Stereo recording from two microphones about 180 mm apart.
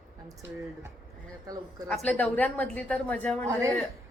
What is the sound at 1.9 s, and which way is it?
A woman's voice, 5° left (ahead or behind).